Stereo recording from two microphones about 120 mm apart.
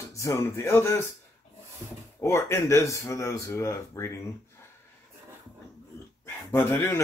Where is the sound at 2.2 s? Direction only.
25° left (ahead or behind).